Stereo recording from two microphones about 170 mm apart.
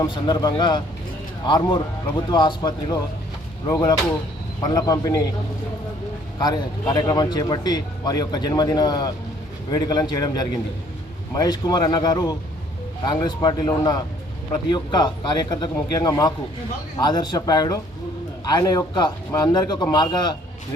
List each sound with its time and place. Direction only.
0.0 s speech: 25° left (ahead or behind)
6.4 s speech: 20° left (ahead or behind)